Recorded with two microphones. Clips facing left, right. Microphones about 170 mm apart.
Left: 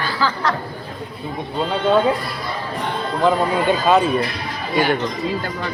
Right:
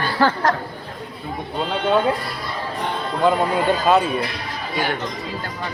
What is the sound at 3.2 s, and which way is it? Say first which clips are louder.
Speech: left 1 dB; centre (ahead or behind).